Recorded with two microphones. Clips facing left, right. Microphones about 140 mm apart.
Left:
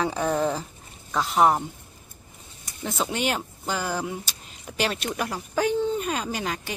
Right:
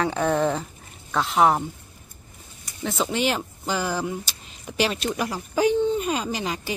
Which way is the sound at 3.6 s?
10° right (ahead or behind).